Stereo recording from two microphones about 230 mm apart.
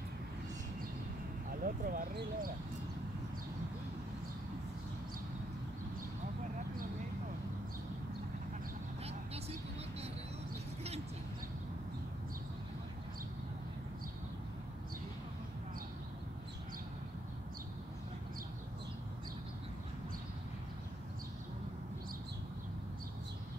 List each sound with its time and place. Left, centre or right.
1.6 s speech: right